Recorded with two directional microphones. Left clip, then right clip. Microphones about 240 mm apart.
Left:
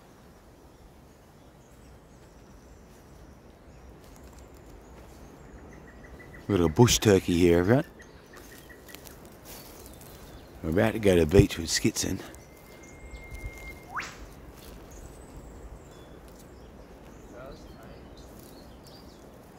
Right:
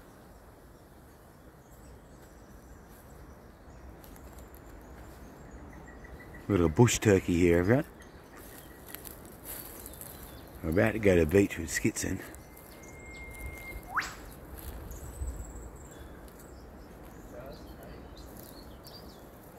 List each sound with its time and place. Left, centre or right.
6.5 s speech: left
10.6 s speech: centre